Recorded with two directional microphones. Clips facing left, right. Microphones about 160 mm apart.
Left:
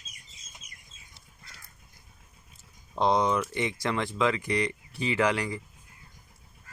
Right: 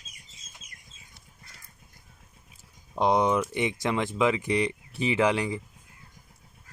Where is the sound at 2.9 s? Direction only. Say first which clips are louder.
Right 2 dB; 15° right (ahead or behind).